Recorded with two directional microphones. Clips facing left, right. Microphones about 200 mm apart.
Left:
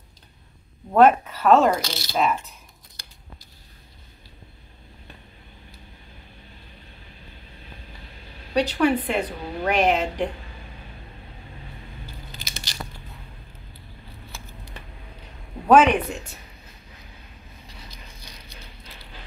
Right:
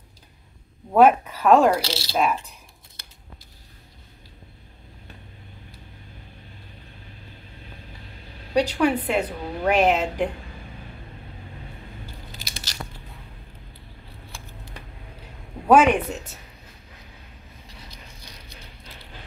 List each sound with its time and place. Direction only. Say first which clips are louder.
0.9 s a woman's voice: even; 10° right (ahead or behind)
1.8 s speech: right 2 dB; 30° right (ahead or behind)
2.1 s a woman's voice: even; 10° right (ahead or behind)
8.7 s a woman's voice: even; 5° right (ahead or behind)
12.3 s biting: even; centre (ahead or behind)
14.3 s scissors: even; 5° left (ahead or behind)
15.6 s a woman's voice: even; 10° right (ahead or behind)